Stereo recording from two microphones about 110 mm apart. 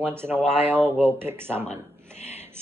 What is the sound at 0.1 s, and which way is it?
Speech, 20° right (ahead or behind).